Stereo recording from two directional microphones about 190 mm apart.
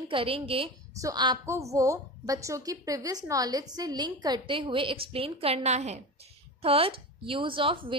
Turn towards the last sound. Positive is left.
turn(degrees=-25)  # may be behind; listen again after turning